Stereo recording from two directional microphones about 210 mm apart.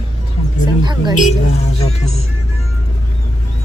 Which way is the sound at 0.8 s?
20° right (ahead or behind).